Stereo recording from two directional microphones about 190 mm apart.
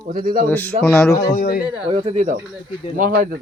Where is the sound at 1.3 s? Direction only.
50° left (ahead or behind).